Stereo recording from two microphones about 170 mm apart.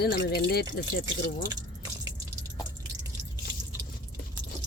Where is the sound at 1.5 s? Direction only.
20° right (ahead or behind).